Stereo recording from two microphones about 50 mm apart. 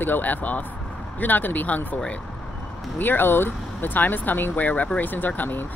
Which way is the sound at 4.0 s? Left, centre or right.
Left.